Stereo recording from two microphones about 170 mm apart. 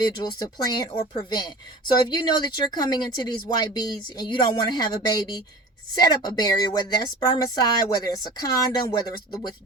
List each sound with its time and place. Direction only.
0.2 s speech: 25° left (ahead or behind)